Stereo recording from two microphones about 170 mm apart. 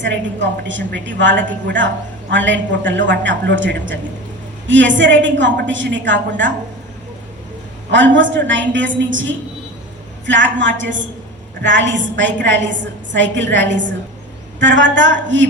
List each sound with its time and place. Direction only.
0.0 s a woman's voice: 90° right
8.4 s a woman's voice: 90° right